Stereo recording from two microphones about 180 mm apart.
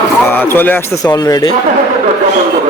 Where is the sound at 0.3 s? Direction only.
10° left (ahead or behind).